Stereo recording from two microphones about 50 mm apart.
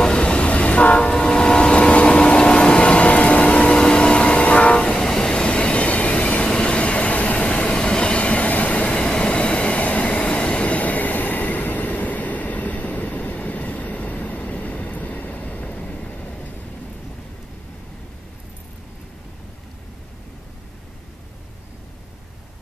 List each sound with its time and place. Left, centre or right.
0.0 s train: left
6.4 s train: centre
16.1 s vehicle: left